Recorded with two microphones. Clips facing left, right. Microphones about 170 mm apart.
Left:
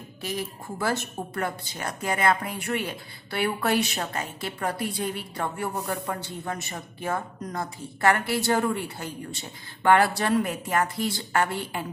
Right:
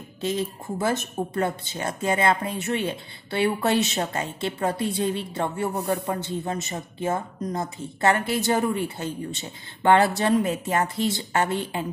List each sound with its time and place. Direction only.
0.2 s a woman's voice: 25° right (ahead or behind)